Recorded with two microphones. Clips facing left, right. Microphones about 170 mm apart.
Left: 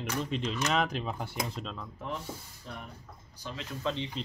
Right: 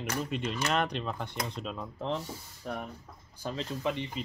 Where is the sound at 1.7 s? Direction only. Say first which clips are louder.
Right 5 dB; 25° right (ahead or behind).